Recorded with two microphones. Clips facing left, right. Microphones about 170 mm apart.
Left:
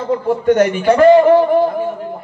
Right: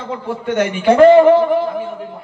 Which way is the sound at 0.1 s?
45° left (ahead or behind).